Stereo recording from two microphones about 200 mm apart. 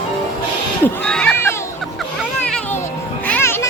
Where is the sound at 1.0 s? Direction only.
5° left (ahead or behind).